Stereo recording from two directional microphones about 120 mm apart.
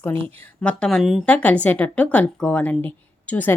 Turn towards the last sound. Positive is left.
turn(degrees=15)  # may be behind; listen again after turning